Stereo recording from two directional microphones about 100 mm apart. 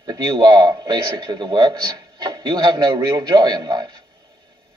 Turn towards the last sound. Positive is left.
turn(degrees=-45)  # may be behind; listen again after turning